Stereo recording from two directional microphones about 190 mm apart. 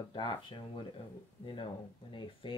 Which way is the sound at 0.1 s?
25° left (ahead or behind).